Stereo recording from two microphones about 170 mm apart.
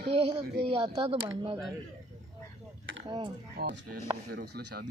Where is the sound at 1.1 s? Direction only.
35° right (ahead or behind).